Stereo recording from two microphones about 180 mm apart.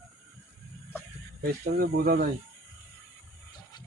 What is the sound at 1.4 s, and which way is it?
Speech, 60° right (ahead or behind).